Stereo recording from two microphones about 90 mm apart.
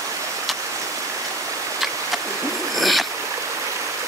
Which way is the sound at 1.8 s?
Centre (ahead or behind).